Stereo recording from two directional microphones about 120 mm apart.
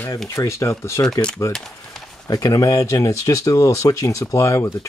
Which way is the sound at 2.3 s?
30° left (ahead or behind).